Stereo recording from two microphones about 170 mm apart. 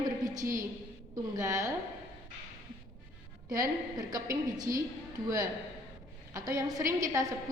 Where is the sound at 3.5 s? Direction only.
20° right (ahead or behind).